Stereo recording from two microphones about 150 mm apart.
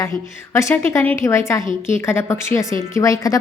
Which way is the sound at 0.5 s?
15° left (ahead or behind).